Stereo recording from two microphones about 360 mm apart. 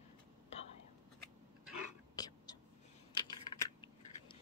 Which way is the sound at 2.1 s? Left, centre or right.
Centre.